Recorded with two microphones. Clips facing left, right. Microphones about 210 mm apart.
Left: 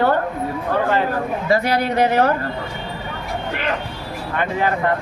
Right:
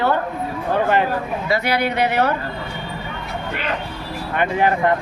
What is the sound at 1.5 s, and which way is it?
Speech, 40° left (ahead or behind).